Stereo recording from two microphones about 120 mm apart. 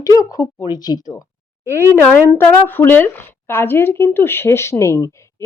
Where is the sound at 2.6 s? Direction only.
20° left (ahead or behind).